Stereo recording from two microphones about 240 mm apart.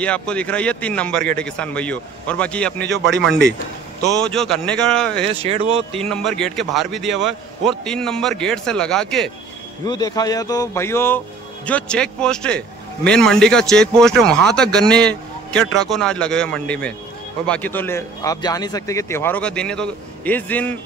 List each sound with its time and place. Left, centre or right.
0.0 s a man's voice: centre
2.9 s speech: right
4.2 s a man's voice: centre
5.3 s speech: right
6.0 s a man's voice: centre
9.8 s a man's voice: centre